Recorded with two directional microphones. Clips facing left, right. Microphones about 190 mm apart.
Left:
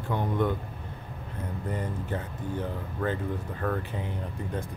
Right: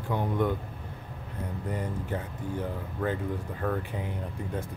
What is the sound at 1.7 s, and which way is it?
Speech, 10° right (ahead or behind).